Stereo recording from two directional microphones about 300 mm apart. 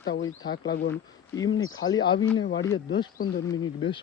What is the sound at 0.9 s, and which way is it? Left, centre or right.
Speech, centre.